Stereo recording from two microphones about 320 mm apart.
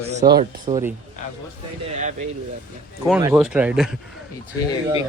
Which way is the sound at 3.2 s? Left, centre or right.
Centre.